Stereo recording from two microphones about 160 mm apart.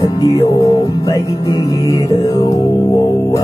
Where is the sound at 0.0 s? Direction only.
20° left (ahead or behind).